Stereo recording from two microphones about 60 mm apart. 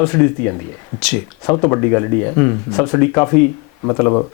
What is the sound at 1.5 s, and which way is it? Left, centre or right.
Speech, left.